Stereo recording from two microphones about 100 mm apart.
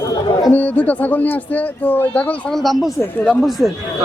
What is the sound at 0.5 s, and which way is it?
Speech, 15° left (ahead or behind).